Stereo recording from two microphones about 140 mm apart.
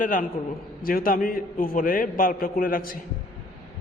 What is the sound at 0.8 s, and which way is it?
Speech, 90° left.